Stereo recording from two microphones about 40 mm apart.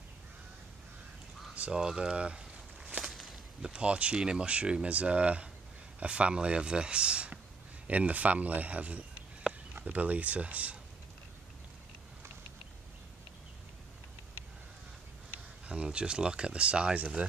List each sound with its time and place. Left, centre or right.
1.7 s speech: centre
3.1 s a sound: centre
3.6 s speech: right
4.1 s speech: right
15.6 s speech: right